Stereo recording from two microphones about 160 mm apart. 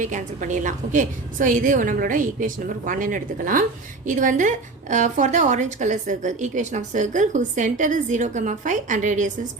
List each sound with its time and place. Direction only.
0.0 s a woman's voice: 50° right (ahead or behind)